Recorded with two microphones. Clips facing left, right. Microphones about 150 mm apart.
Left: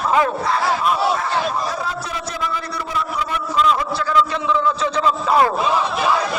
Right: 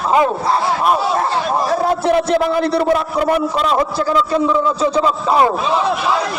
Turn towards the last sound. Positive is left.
turn(degrees=-20)  # may be behind; listen again after turning